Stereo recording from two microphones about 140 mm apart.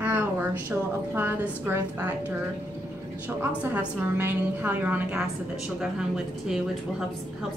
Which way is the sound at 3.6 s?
15° right (ahead or behind).